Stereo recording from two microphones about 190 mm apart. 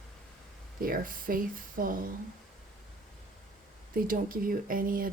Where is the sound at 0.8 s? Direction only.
50° right (ahead or behind).